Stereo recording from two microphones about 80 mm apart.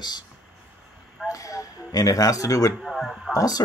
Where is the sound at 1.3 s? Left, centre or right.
Left.